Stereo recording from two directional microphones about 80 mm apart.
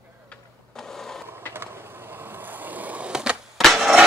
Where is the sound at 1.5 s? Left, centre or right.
Right; by 3.6 s centre.